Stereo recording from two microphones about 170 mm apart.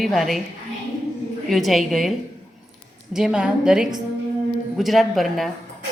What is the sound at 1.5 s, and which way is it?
A woman's voice, centre (ahead or behind).